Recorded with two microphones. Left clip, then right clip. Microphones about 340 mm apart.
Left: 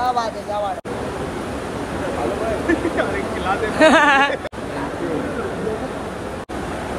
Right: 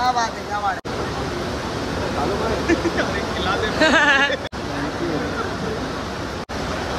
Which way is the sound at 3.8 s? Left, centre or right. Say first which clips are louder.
Left 3 dB; centre.